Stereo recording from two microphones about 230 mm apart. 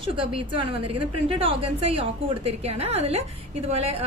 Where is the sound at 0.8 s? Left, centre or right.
Right.